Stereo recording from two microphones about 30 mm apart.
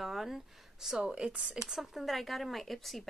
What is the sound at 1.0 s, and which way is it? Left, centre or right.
Speech, right.